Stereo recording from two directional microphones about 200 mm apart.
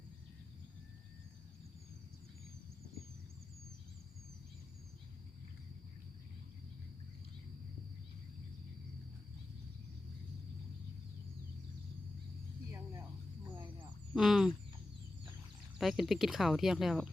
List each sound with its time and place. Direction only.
14.1 s speech: centre (ahead or behind)
15.8 s speech: centre (ahead or behind)